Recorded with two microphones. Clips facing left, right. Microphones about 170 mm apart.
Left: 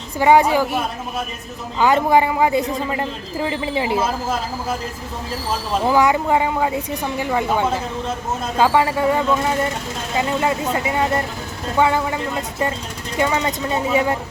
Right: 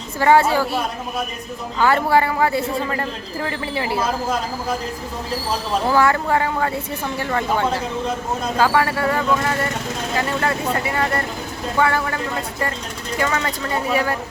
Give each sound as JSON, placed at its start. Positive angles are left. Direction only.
{"t": 0.2, "sound": "speech", "side_deg": 15}
{"t": 1.8, "sound": "speech", "side_deg": 15}
{"t": 5.9, "sound": "speech", "side_deg": 15}